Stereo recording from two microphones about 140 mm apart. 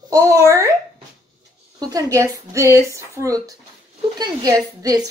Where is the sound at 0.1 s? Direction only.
20° right (ahead or behind).